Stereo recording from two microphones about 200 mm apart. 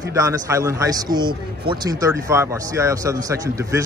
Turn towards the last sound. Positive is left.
turn(degrees=-15)  # may be behind; listen again after turning